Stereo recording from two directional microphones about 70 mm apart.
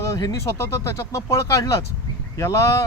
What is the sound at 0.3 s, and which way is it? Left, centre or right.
Speech, left.